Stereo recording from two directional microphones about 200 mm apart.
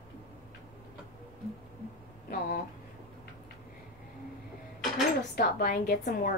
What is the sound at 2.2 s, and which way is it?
Speech, 45° left (ahead or behind).